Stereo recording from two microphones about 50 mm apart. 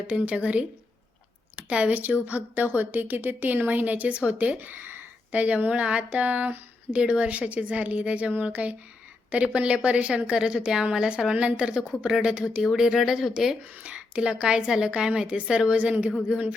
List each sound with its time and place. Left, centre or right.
0.1 s a woman's voice: right
5.3 s a woman's voice: right; by 13.6 s centre
13.8 s a woman's voice: centre